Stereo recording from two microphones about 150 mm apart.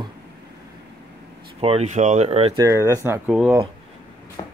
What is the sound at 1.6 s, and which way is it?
Speech, 45° right (ahead or behind).